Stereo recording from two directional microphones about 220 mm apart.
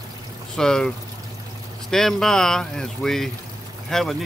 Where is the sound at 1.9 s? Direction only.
Centre (ahead or behind).